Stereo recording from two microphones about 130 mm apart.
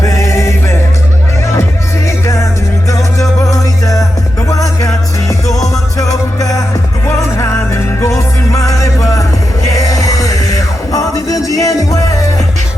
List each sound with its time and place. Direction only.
0.0 s music: 25° left (ahead or behind)
2.2 s music: 25° left (ahead or behind)